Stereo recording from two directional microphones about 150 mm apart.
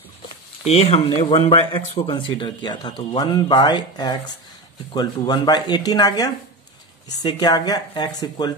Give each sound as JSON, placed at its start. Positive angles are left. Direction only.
{"t": 0.7, "sound": "speech", "side_deg": 40}